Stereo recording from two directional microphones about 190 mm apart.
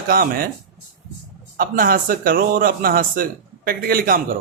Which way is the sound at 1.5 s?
45° right (ahead or behind).